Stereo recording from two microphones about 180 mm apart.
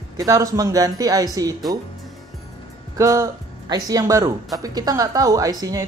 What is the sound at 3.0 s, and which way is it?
Speech, 20° right (ahead or behind).